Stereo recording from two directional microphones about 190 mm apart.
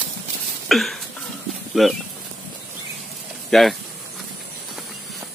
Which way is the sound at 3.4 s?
Centre (ahead or behind).